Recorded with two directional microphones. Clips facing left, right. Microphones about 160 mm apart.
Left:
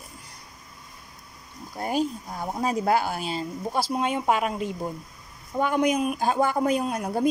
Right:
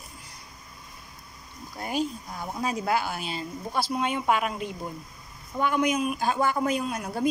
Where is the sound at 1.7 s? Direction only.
40° left (ahead or behind).